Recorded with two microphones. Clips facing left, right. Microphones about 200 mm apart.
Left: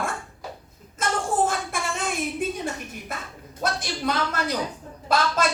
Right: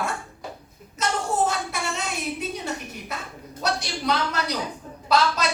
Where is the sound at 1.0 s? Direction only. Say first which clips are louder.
Even; 50° left (ahead or behind).